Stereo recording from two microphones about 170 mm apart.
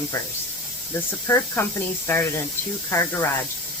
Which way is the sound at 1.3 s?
15° left (ahead or behind).